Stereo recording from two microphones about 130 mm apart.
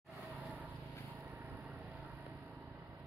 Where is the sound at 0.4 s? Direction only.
10° right (ahead or behind).